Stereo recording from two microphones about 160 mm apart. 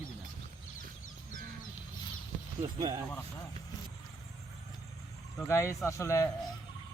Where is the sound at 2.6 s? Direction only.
25° right (ahead or behind).